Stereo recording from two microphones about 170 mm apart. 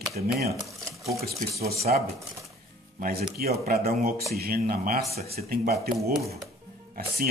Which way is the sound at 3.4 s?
60° right (ahead or behind).